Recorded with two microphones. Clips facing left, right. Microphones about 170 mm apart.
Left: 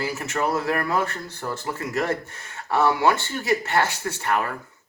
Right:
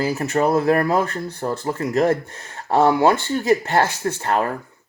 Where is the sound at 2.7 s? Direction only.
25° right (ahead or behind).